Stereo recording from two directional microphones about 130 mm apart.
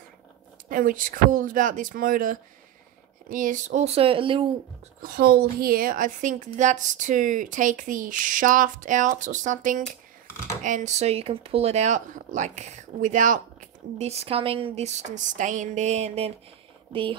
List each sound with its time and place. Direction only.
0.7 s speech: 90° right; by 4.5 s 40° right (ahead or behind)
5.8 s speech: 90° right
10.2 s computer keyboard: 25° left (ahead or behind)
10.6 s speech: 70° right (ahead or behind)
16.9 s speech: 40° right (ahead or behind)